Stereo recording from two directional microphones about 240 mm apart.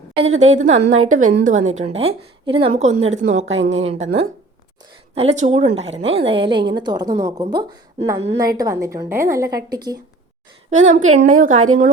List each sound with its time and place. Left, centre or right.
0.2 s a woman's voice: right
3.6 s speech: right
3.8 s a woman's voice: right
10.7 s a woman's voice: right